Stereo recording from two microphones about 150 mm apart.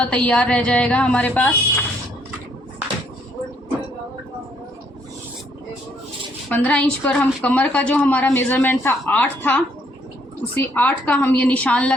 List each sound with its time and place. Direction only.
0.0 s a woman's voice: 10° left (ahead or behind)
6.5 s a woman's voice: 10° left (ahead or behind)